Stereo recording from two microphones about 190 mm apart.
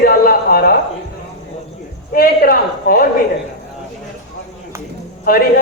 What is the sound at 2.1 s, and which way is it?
Speech, 50° left (ahead or behind).